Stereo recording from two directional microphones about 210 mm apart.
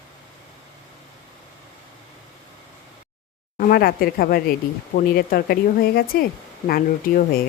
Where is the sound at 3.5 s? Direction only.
45° left (ahead or behind).